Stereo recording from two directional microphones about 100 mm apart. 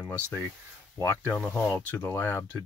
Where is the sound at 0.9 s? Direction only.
20° left (ahead or behind).